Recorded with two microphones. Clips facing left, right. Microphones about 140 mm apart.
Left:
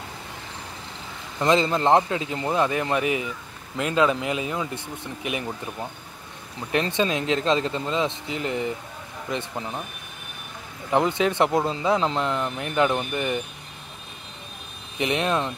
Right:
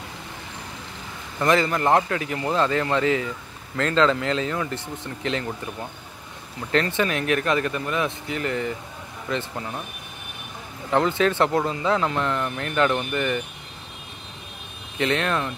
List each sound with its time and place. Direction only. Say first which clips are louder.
1.4 s a man's voice: even; 20° left (ahead or behind)
10.9 s a man's voice: right 1 dB; 15° left (ahead or behind)
15.0 s a man's voice: even; 15° left (ahead or behind)